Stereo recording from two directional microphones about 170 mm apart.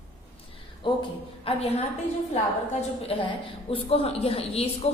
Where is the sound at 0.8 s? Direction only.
30° left (ahead or behind).